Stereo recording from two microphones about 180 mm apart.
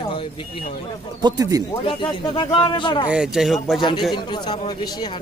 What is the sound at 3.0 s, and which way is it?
Speech, 5° right (ahead or behind).